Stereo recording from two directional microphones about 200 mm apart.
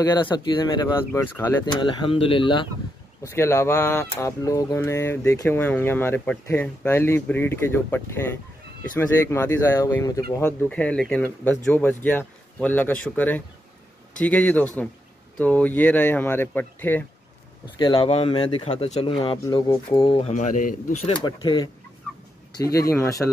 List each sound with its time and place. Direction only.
0.0 s speech: 20° left (ahead or behind)
3.3 s speech: 15° left (ahead or behind)
17.7 s speech: 25° left (ahead or behind)
21.1 s speech: 25° left (ahead or behind)
22.8 s speech: 15° left (ahead or behind)